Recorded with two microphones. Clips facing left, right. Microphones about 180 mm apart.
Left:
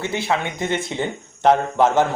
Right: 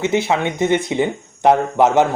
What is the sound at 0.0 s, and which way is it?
Speech, 20° right (ahead or behind).